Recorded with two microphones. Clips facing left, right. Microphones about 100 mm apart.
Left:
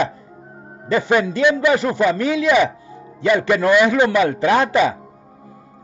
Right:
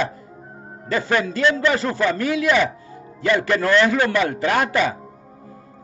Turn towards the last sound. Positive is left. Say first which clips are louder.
# left 4 dB
turn(degrees=20)  # may be behind; listen again after turning